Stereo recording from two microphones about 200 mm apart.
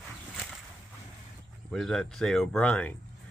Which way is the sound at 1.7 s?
Centre (ahead or behind).